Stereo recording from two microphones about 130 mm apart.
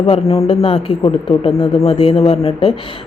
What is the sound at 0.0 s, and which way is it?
Speech, 50° left (ahead or behind).